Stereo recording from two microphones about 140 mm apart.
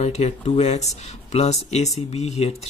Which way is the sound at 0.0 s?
55° left (ahead or behind).